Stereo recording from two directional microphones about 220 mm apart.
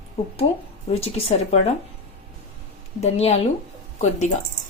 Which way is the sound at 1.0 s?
25° left (ahead or behind).